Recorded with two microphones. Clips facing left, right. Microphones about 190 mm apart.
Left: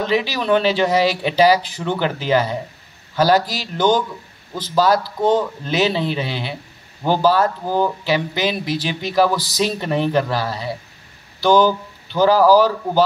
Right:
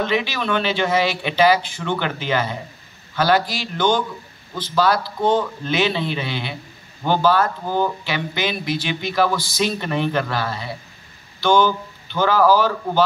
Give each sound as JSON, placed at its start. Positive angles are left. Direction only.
{"t": 0.0, "sound": "speech", "side_deg": 35}